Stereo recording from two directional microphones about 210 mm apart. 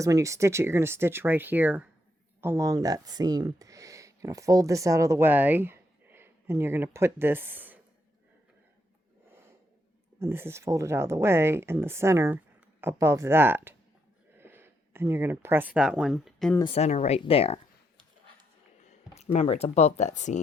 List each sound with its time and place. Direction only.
0.0 s speech: 15° right (ahead or behind)
10.2 s speech: 10° right (ahead or behind)
16.6 s speech: 25° left (ahead or behind)
19.1 s speech: 30° left (ahead or behind)